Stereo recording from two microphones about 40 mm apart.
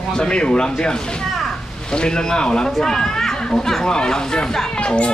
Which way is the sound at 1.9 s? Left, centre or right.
Left.